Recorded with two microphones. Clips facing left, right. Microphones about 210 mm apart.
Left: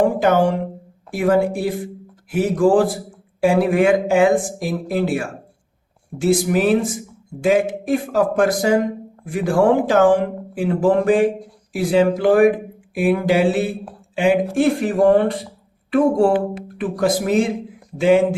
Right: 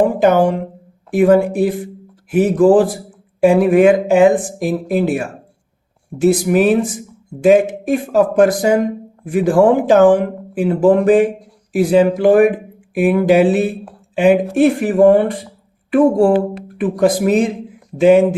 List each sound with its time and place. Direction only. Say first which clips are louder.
0.0 s speech: right 3 dB; 15° right (ahead or behind)
16.8 s speech: right 5 dB; 20° right (ahead or behind)